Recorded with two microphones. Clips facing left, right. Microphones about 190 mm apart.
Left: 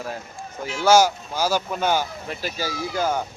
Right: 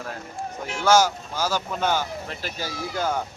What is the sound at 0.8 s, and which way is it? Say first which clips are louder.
Speech: left 2 dB; 10° left (ahead or behind).